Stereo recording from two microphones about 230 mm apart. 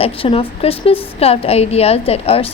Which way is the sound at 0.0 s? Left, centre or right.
Left.